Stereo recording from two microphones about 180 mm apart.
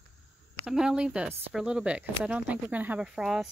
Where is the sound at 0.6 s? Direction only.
5° right (ahead or behind).